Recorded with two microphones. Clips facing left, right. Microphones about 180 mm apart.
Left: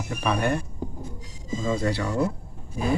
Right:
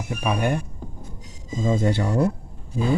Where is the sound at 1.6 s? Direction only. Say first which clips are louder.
Right 4 dB; 25° right (ahead or behind).